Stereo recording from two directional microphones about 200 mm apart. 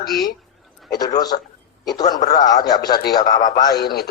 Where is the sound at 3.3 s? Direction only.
40° left (ahead or behind).